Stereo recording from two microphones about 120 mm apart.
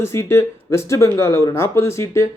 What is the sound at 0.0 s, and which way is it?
Speech, 20° left (ahead or behind).